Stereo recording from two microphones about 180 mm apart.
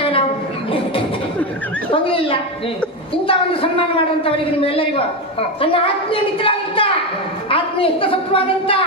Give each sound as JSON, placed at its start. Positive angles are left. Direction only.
{"t": 1.9, "sound": "a woman's voice", "side_deg": 30}